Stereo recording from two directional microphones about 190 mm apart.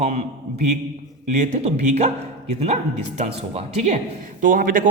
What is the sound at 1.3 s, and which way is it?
A man's voice, 35° right (ahead or behind).